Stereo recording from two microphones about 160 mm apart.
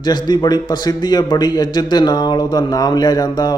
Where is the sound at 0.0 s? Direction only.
25° left (ahead or behind).